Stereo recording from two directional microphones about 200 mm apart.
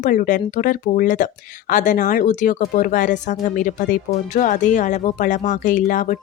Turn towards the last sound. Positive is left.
turn(degrees=40)  # may be behind; listen again after turning